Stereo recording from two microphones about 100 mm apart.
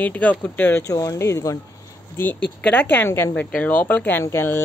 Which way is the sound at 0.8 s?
35° left (ahead or behind).